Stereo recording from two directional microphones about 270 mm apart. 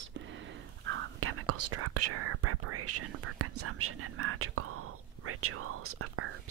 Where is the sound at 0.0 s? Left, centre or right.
Right.